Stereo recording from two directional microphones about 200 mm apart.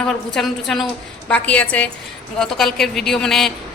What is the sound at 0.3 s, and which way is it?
A woman's voice, centre (ahead or behind).